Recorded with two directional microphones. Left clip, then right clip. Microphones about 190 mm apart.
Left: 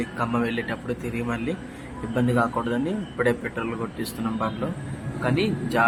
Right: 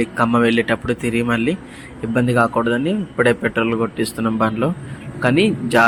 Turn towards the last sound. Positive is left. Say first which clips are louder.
# right 8 dB
turn(degrees=-30)  # may be behind; listen again after turning